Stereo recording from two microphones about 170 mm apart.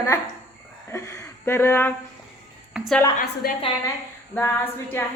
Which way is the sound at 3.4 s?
60° left (ahead or behind).